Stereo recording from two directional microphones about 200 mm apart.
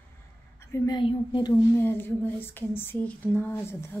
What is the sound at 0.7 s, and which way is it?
Speech, 20° left (ahead or behind).